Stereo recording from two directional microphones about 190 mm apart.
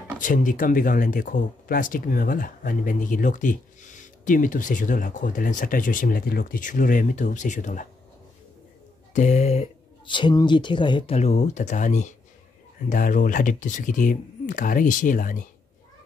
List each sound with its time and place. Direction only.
0.2 s speech: 45° left (ahead or behind)
9.1 s speech: 40° left (ahead or behind)